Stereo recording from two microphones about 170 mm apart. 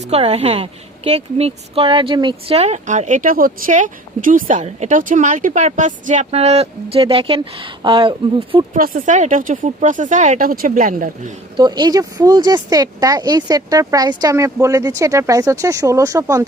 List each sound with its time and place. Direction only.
0.0 s a woman's voice: 35° right (ahead or behind)
8.7 s speech: 55° right (ahead or behind)
11.5 s speech: 25° right (ahead or behind)